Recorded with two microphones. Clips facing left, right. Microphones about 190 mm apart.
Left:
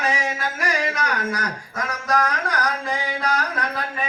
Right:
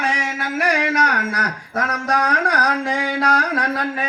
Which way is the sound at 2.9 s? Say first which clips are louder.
Right 5 dB; 80° right.